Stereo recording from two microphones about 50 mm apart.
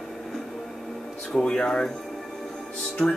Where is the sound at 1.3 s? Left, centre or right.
Centre.